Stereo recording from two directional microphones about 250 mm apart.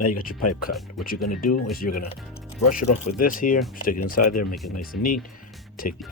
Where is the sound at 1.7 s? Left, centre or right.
Left.